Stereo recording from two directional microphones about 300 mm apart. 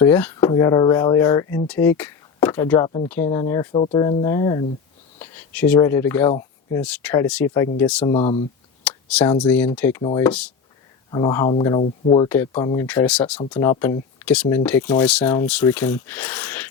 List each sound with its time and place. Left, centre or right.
0.0 s speech: centre
8.0 s speech: centre
8.8 s speech: centre